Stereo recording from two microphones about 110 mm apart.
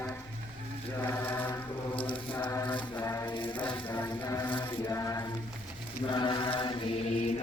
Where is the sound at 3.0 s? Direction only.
30° left (ahead or behind).